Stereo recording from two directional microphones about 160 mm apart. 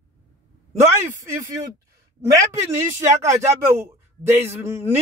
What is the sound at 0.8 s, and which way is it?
Speech, 20° right (ahead or behind).